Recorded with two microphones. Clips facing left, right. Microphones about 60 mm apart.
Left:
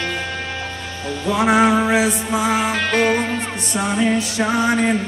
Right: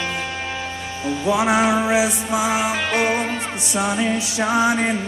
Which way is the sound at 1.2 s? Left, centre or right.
Centre.